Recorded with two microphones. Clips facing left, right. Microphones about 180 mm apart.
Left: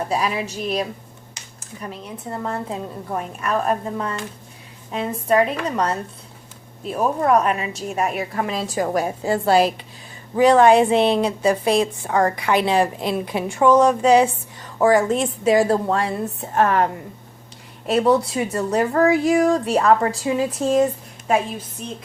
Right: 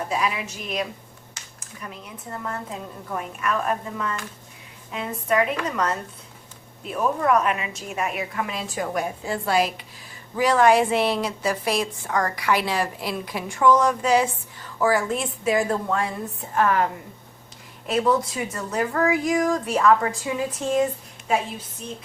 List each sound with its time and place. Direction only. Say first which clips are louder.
0.1 s a woman's voice: left 3 dB; 35° left (ahead or behind)
17.9 s a woman's voice: left 4 dB; 30° left (ahead or behind)